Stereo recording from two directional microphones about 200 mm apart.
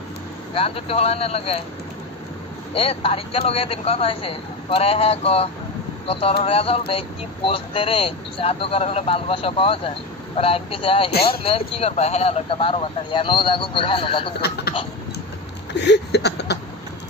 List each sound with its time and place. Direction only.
0.6 s speech: 30° left (ahead or behind)
2.7 s speech: 30° left (ahead or behind)
15.7 s a sound: 60° left (ahead or behind)